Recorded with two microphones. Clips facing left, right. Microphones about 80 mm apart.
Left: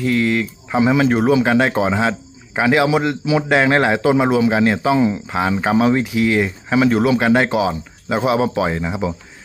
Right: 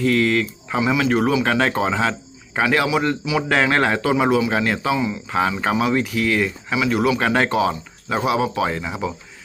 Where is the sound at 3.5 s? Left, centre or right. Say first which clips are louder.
Left 3 dB; centre.